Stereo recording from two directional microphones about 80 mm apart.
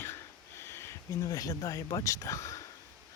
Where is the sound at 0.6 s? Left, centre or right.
Left.